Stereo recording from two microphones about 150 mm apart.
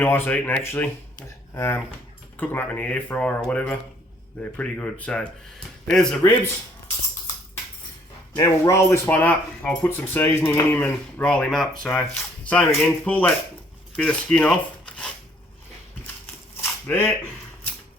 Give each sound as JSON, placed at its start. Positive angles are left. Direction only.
{"t": 0.0, "sound": "speech", "side_deg": 15}
{"t": 8.4, "sound": "speech", "side_deg": 20}
{"t": 16.6, "sound": "a sound", "side_deg": 15}